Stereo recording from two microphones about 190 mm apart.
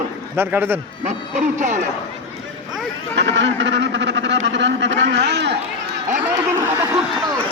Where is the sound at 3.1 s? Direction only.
70° right (ahead or behind).